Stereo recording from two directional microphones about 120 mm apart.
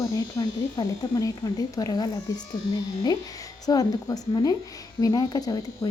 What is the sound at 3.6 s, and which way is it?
Speech, 30° left (ahead or behind).